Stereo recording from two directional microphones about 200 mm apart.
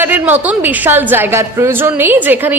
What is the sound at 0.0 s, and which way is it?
A woman's voice, 10° right (ahead or behind).